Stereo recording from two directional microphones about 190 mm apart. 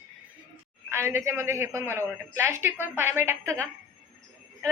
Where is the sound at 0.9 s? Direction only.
10° right (ahead or behind).